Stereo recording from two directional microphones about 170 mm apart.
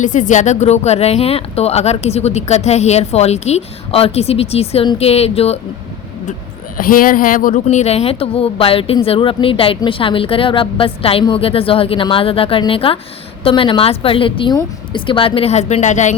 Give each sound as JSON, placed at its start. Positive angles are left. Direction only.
{"t": 0.0, "sound": "speech", "side_deg": 45}
{"t": 6.7, "sound": "speech", "side_deg": 55}